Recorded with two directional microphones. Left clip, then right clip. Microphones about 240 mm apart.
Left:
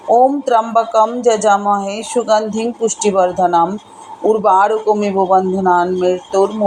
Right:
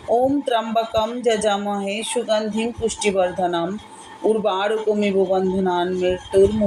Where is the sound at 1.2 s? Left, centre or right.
Centre.